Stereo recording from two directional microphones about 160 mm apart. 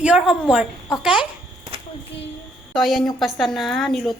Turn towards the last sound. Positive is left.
turn(degrees=0)  # may be behind; listen again after turning